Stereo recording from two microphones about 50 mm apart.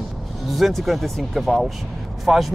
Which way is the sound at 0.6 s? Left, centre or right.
Centre.